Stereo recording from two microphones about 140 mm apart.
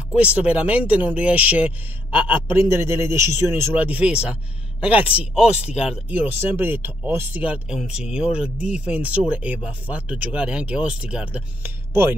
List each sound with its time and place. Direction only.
0.4 s a man's voice: 10° right (ahead or behind)